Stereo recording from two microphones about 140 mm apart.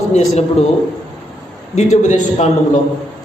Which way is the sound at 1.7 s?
55° left (ahead or behind).